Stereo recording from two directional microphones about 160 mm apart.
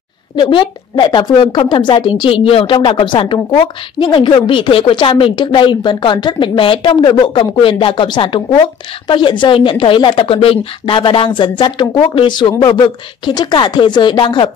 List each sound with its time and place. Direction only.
0.4 s a woman's voice: 30° left (ahead or behind)